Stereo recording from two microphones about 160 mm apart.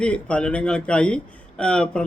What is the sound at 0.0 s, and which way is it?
A man's voice, 5° left (ahead or behind).